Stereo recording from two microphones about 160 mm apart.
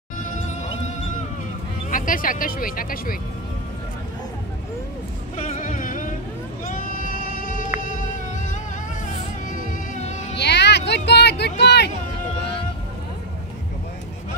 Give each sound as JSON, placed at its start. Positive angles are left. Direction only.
{"t": 0.2, "sound": "music", "side_deg": 50}
{"t": 1.9, "sound": "speech", "side_deg": 60}
{"t": 5.4, "sound": "a sound", "side_deg": 55}
{"t": 6.6, "sound": "sheep", "side_deg": 55}
{"t": 9.0, "sound": "music", "side_deg": 55}
{"t": 10.3, "sound": "a sound", "side_deg": 90}